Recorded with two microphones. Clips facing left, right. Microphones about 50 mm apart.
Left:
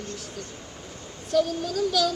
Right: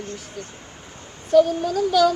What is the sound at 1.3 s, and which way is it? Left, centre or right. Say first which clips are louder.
Speech: right 8 dB; centre.